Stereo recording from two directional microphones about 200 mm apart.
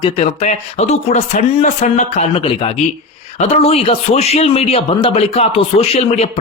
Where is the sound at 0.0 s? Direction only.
30° left (ahead or behind).